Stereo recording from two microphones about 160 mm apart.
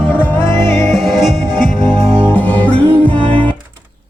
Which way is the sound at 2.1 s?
10° left (ahead or behind).